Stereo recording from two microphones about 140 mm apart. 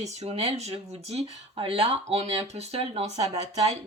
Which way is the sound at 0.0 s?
50° right (ahead or behind).